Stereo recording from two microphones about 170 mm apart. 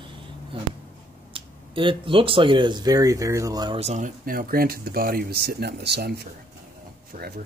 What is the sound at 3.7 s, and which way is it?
Speech, 40° right (ahead or behind).